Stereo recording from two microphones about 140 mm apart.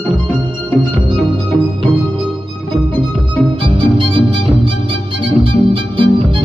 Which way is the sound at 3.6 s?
35° right (ahead or behind).